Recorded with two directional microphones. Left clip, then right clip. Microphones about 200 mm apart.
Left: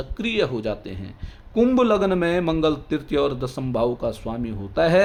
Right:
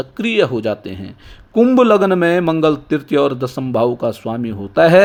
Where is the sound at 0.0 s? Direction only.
30° right (ahead or behind).